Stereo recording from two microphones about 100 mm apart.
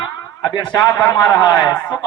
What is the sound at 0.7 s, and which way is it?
A man's voice, 30° left (ahead or behind).